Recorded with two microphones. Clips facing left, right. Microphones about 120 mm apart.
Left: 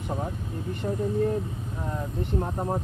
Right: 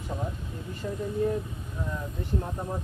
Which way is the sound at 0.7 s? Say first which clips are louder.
Left 4 dB; 65° left (ahead or behind).